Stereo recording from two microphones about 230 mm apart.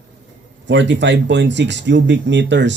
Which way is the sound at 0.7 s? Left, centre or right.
Right.